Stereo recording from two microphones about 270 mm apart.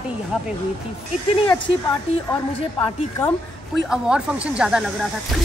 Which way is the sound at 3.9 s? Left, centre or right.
Centre.